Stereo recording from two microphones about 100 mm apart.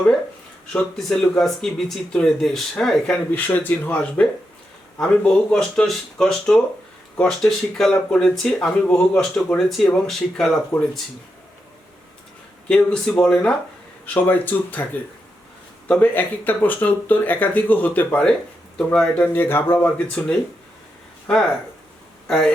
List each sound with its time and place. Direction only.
0.7 s speech: 10° left (ahead or behind)
3.3 s speech: 20° left (ahead or behind)
12.6 s speech: 10° left (ahead or behind)
15.9 s speech: 15° left (ahead or behind)